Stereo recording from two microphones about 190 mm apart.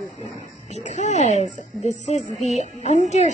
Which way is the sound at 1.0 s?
35° left (ahead or behind).